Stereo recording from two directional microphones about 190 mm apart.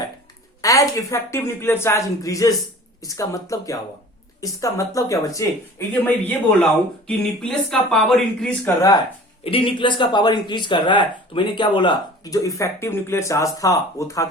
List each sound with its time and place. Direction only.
0.6 s a woman's voice: 15° left (ahead or behind)
9.4 s speech: 30° left (ahead or behind)